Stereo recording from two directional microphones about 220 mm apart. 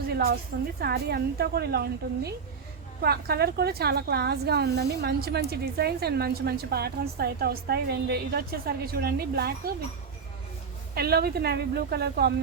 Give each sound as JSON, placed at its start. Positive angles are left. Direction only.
{"t": 0.8, "sound": "a woman's voice", "side_deg": -45}
{"t": 10.9, "sound": "a woman's voice", "side_deg": -45}